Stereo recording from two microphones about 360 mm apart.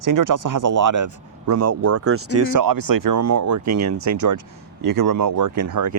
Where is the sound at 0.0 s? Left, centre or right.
Right.